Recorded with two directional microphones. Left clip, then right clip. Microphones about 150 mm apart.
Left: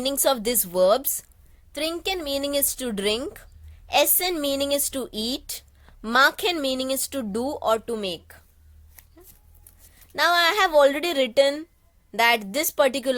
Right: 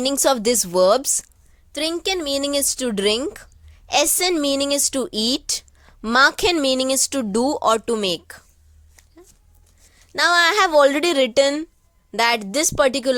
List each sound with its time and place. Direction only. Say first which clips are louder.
0.0 s speech: right 4 dB; 35° right (ahead or behind)
9.0 s a sound: right 2 dB; 5° right (ahead or behind)
10.1 s speech: right 4 dB; 35° right (ahead or behind)